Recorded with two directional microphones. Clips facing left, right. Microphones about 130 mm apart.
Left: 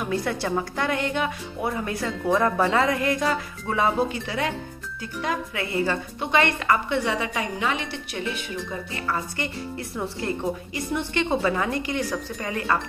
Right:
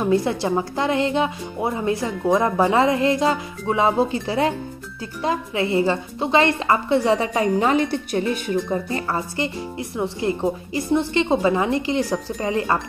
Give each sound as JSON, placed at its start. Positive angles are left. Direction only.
{"t": 0.0, "sound": "a woman's voice", "side_deg": -25}